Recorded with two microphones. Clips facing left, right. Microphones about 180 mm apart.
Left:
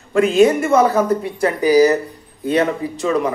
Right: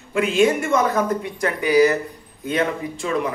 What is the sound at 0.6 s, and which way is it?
A man's voice, 35° left (ahead or behind).